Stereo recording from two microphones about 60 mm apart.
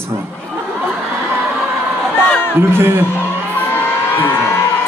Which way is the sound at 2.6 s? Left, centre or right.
Right.